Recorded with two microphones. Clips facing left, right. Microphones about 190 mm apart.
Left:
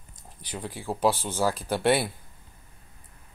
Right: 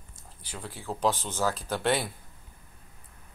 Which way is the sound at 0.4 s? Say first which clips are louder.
Left 5 dB; 15° left (ahead or behind).